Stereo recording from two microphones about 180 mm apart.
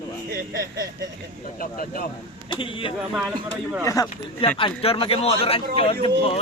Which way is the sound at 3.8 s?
20° left (ahead or behind).